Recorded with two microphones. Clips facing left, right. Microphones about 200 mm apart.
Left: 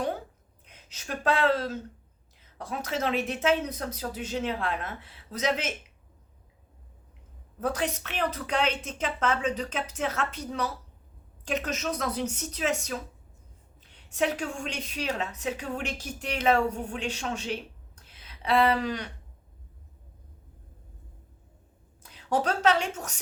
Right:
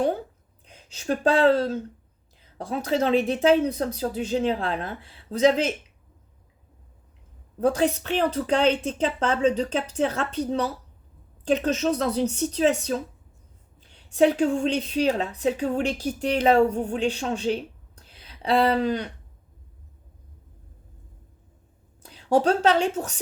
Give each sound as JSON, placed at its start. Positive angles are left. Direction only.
{"t": 0.6, "sound": "a woman's voice", "side_deg": -30}
{"t": 7.6, "sound": "a woman's voice", "side_deg": -30}
{"t": 13.8, "sound": "a woman's voice", "side_deg": -30}
{"t": 22.0, "sound": "a woman's voice", "side_deg": -30}